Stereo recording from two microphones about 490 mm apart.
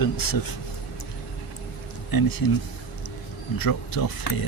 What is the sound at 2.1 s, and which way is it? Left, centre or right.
Speech, left.